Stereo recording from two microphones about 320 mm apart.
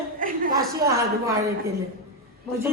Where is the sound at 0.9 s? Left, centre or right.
Centre.